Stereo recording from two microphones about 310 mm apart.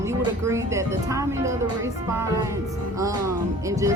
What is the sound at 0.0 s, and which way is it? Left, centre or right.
Speech, centre.